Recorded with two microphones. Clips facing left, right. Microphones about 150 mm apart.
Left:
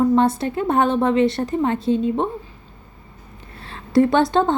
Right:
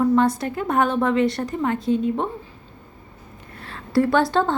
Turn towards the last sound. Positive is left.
turn(degrees=20)  # may be behind; listen again after turning